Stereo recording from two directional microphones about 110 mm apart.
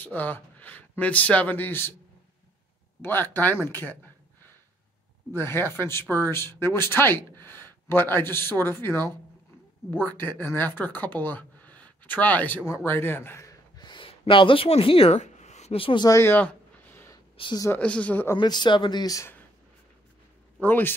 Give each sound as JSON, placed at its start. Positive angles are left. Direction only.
{"t": 0.0, "sound": "speech", "side_deg": 15}
{"t": 3.0, "sound": "speech", "side_deg": 20}
{"t": 5.3, "sound": "speech", "side_deg": 20}
{"t": 12.8, "sound": "a sound", "side_deg": 20}
{"t": 14.7, "sound": "speech", "side_deg": 55}
{"t": 15.8, "sound": "speech", "side_deg": 45}
{"t": 16.1, "sound": "a sound", "side_deg": 20}
{"t": 17.7, "sound": "speech", "side_deg": 10}
{"t": 18.4, "sound": "speech", "side_deg": 40}
{"t": 20.6, "sound": "speech", "side_deg": 15}